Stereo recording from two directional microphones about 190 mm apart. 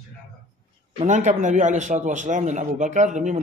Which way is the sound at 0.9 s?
40° right (ahead or behind).